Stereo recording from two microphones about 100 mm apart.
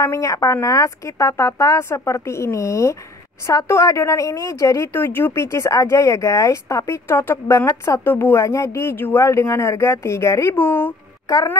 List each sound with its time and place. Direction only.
0.0 s a woman's voice: 30° left (ahead or behind)
10.5 s speech: 15° left (ahead or behind)